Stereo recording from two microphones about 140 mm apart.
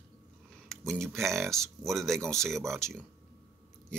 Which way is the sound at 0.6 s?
Centre (ahead or behind).